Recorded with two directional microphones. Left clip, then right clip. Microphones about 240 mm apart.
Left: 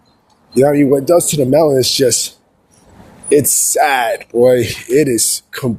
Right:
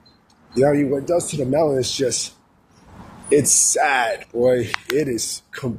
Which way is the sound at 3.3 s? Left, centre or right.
Left.